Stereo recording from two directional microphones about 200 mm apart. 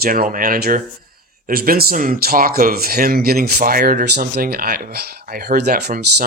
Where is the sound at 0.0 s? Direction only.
45° right (ahead or behind).